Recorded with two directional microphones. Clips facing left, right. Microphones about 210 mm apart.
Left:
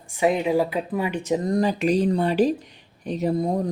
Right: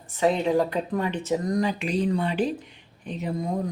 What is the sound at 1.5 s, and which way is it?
Speech, 35° left (ahead or behind).